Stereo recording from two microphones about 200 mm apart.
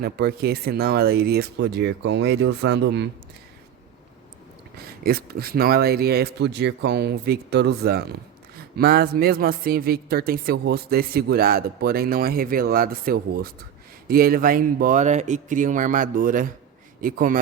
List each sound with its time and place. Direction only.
0.0 s speech: 50° right (ahead or behind)
4.9 s a man's voice: 50° right (ahead or behind)